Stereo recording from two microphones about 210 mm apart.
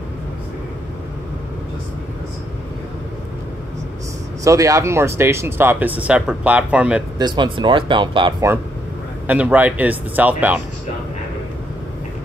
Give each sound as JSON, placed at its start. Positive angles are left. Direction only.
{"t": 4.5, "sound": "speech", "side_deg": -15}
{"t": 7.2, "sound": "speech", "side_deg": -20}
{"t": 9.3, "sound": "speech", "side_deg": -5}